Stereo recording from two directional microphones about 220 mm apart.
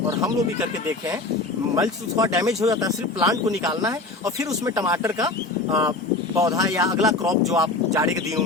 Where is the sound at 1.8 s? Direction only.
15° right (ahead or behind).